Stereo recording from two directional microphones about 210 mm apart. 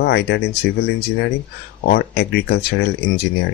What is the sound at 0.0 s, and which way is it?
Speech, 50° left (ahead or behind).